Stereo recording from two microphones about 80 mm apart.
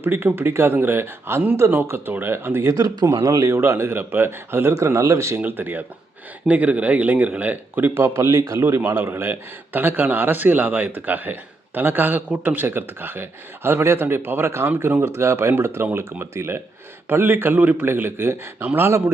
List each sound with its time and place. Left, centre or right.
0.0 s speech: right
2.7 s a man's voice: right
5.4 s a man's voice: right